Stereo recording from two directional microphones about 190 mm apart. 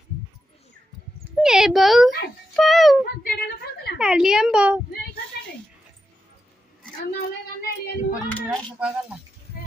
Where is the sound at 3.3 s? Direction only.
55° left (ahead or behind).